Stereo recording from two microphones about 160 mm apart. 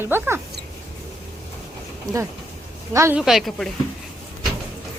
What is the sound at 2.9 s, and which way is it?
Speech, 15° right (ahead or behind).